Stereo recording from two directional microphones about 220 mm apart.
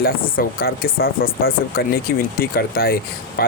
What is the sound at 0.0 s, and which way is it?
Speech, 40° left (ahead or behind).